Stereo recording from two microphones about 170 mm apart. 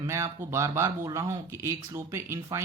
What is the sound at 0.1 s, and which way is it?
Speech, 15° right (ahead or behind).